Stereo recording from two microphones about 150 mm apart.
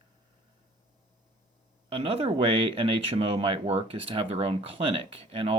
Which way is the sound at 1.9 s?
40° right (ahead or behind).